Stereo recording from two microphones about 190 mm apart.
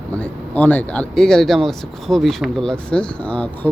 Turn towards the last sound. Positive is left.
turn(degrees=5)  # may be behind; listen again after turning